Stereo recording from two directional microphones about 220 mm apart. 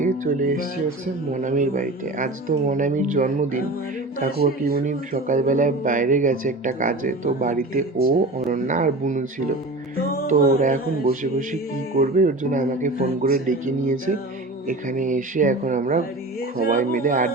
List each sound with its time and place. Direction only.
0.0 s speech: 40° right (ahead or behind)
10.2 s speech: 35° right (ahead or behind)